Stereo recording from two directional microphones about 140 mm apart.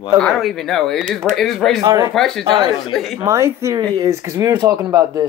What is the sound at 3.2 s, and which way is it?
Speech, 20° right (ahead or behind).